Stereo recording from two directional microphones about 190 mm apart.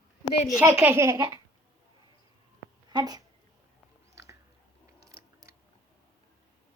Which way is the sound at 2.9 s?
20° right (ahead or behind).